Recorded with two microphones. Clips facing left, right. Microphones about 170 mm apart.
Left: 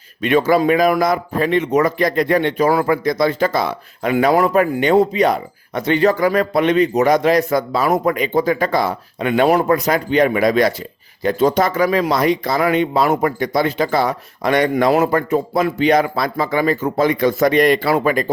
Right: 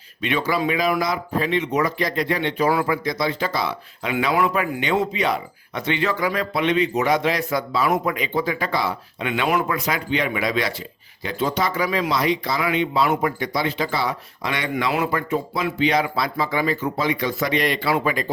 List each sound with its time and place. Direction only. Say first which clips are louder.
0.2 s speech: left 8 dB; 45° left (ahead or behind)